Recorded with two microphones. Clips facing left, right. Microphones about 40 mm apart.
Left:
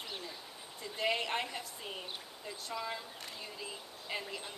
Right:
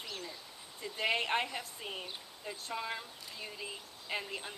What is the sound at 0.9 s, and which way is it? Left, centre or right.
Speech, centre.